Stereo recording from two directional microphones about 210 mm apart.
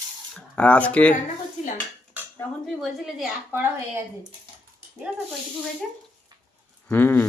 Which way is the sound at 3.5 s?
10° right (ahead or behind).